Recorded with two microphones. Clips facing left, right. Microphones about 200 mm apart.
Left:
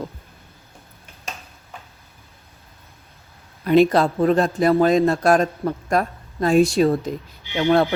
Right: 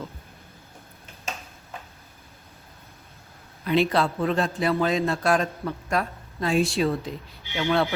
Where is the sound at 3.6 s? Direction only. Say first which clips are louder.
Left 7 dB; 45° left (ahead or behind).